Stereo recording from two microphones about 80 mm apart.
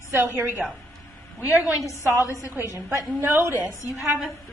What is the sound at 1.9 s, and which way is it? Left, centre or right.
Speech, left.